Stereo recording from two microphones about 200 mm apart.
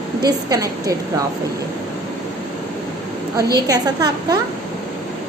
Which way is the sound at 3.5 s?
20° right (ahead or behind).